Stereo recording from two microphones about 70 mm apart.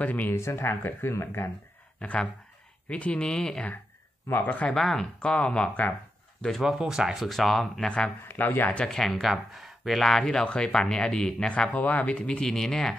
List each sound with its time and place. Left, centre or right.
0.0 s speech: left
0.3 s speech: left
2.0 s speech: centre
4.3 s speech: left
4.7 s speech: centre
6.6 s speech: centre
8.2 s speech: left
8.7 s speech: centre